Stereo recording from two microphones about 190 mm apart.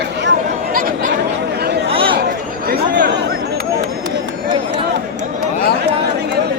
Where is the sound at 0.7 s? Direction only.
50° right (ahead or behind).